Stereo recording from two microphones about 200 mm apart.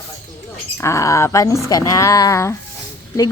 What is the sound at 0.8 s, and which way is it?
A woman's voice, 15° left (ahead or behind).